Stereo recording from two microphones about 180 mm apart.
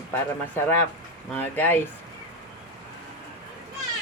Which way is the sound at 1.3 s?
10° left (ahead or behind).